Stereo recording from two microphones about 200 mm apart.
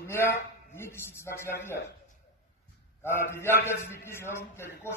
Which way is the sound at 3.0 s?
10° left (ahead or behind).